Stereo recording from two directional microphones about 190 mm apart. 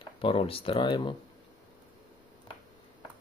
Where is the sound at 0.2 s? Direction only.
30° left (ahead or behind).